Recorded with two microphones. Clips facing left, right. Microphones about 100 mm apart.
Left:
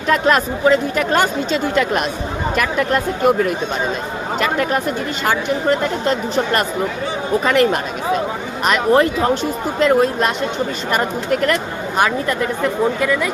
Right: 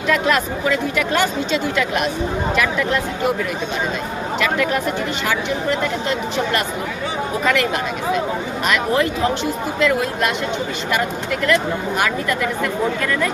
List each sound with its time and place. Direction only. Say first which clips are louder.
0.1 s speech: left 3 dB; 40° left (ahead or behind)
4.4 s speech: left 1 dB; 40° left (ahead or behind)
6.1 s speech: left 3 dB; 45° left (ahead or behind)
8.9 s speech: left 7 dB; 45° left (ahead or behind)
11.9 s speech: left 6 dB; 30° left (ahead or behind)
13.0 s speech: left 2 dB; 10° left (ahead or behind)